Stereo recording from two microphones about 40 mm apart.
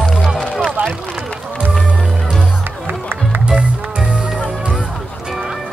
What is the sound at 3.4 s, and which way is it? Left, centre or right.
Music, right.